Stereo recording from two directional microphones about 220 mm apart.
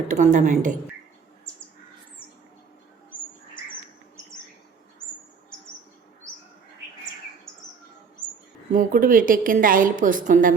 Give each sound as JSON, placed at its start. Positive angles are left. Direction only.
{"t": 0.1, "sound": "a woman's voice", "side_deg": -35}
{"t": 8.7, "sound": "a woman's voice", "side_deg": -35}